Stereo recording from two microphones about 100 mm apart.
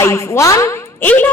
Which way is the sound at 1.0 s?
15° left (ahead or behind).